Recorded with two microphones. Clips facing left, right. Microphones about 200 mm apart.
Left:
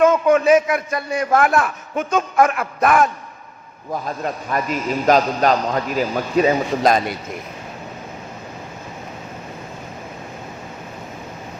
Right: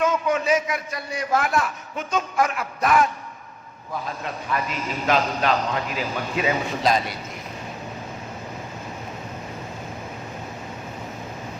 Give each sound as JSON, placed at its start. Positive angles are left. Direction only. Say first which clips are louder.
{"t": 0.0, "sound": "a man's voice", "louder": "left 8 dB", "side_deg": 50}
{"t": 4.0, "sound": "a man's voice", "louder": "left 6 dB", "side_deg": 45}